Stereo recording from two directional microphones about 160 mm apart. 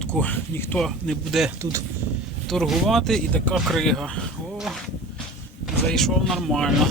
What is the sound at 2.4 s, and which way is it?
Speech, centre (ahead or behind).